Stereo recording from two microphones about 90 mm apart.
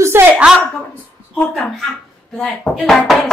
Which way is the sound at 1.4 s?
5° left (ahead or behind).